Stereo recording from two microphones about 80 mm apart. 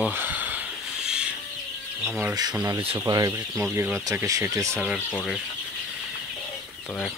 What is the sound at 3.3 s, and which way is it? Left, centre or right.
Speech, right.